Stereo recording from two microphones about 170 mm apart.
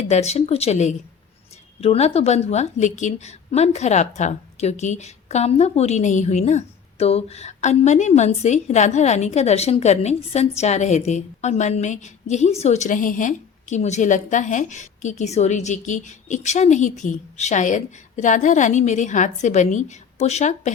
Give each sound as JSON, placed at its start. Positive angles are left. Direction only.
{"t": 0.1, "sound": "a woman's voice", "side_deg": 40}